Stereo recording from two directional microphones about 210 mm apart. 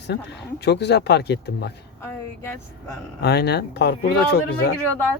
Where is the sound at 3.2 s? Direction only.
50° left (ahead or behind).